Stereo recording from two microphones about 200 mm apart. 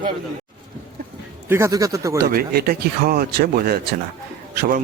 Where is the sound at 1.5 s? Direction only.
15° right (ahead or behind).